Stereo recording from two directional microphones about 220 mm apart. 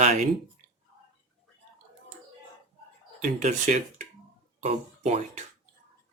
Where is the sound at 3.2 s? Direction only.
35° right (ahead or behind).